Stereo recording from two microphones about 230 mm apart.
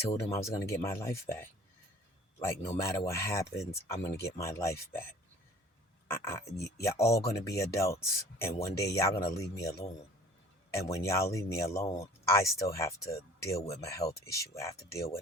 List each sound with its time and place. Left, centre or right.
0.1 s speech: centre
2.8 s speech: centre
6.1 s speech: centre